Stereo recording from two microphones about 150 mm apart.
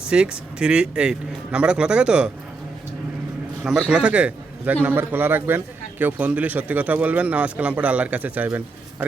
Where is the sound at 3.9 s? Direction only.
10° right (ahead or behind).